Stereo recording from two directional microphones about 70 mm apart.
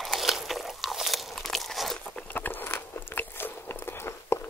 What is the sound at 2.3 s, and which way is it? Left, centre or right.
Biting, left.